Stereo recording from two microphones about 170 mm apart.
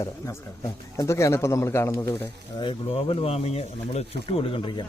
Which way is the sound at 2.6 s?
30° left (ahead or behind).